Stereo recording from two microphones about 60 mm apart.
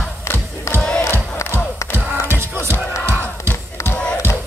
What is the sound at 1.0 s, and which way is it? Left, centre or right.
Music, left.